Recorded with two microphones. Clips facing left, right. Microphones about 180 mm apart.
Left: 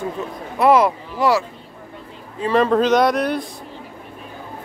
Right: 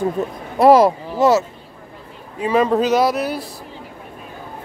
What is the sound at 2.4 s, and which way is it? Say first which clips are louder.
Speech: even; 10° right (ahead or behind).